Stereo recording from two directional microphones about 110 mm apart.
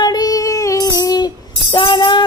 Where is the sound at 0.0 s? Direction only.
35° left (ahead or behind).